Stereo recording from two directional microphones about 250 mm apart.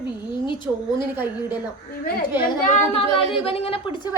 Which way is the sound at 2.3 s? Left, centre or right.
Left.